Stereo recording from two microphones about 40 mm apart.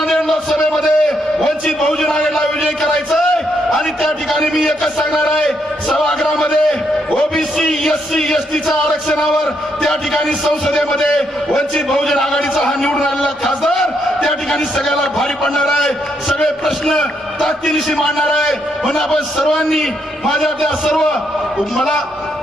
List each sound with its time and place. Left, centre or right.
0.1 s a man's voice: centre
4.3 s a man's voice: centre
14.8 s a man's voice: centre
18.0 s a man's voice: centre
19.5 s a man's voice: centre